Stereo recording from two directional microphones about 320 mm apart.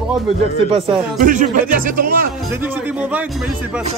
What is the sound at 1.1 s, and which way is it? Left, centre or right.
Speech, right.